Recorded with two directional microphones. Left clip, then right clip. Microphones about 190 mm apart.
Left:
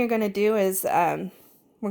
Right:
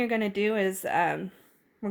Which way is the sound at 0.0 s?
30° left (ahead or behind).